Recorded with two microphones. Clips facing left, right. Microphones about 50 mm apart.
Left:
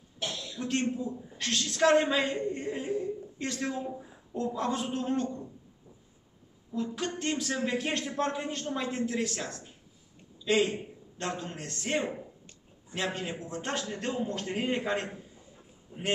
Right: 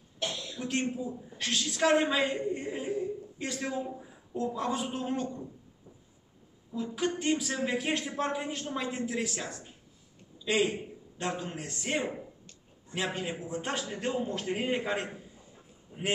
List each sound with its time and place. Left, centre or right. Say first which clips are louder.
0.2 s a woman's voice: even; centre
6.7 s a woman's voice: right 1 dB; centre
15.9 s a man's voice: right 2 dB; centre